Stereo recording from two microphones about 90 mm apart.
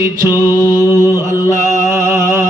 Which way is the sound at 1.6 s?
35° right (ahead or behind).